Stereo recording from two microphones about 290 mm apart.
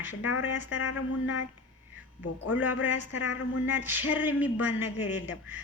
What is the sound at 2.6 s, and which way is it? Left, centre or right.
Speech, left.